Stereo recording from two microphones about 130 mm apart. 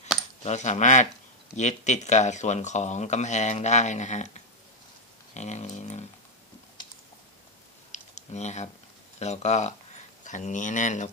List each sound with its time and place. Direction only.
0.4 s speech: 60° left (ahead or behind)
7.9 s typing: 60° left (ahead or behind)
9.2 s speech: 60° left (ahead or behind)
10.2 s speech: 70° left (ahead or behind)